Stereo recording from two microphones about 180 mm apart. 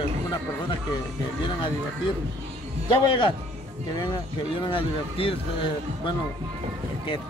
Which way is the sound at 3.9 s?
25° left (ahead or behind).